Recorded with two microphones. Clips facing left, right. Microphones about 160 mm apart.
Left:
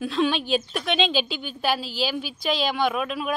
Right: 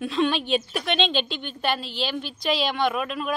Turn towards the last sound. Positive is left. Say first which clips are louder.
# even
turn(degrees=0)  # may be behind; listen again after turning